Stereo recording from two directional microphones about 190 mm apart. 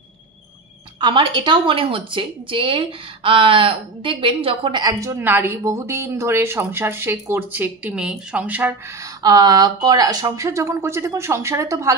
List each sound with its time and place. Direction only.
1.0 s a woman's voice: 25° right (ahead or behind); by 8.7 s 10° right (ahead or behind)
9.2 s a woman's voice: 20° right (ahead or behind)